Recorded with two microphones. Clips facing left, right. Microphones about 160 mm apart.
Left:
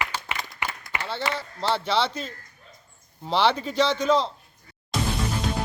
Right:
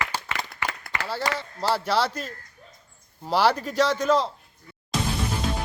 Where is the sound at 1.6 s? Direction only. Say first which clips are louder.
Right 1 dB; 5° right (ahead or behind).